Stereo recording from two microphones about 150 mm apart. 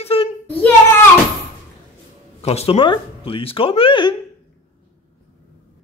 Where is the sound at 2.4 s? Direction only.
45° left (ahead or behind).